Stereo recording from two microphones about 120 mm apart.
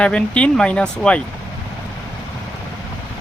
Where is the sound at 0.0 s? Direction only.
10° left (ahead or behind).